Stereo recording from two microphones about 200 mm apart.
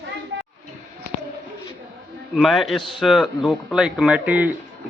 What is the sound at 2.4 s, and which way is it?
A man's voice, centre (ahead or behind).